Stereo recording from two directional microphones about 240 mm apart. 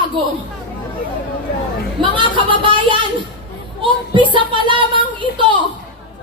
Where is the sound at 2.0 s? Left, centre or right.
Right.